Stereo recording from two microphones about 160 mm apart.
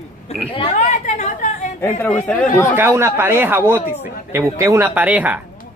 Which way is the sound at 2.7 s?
15° right (ahead or behind).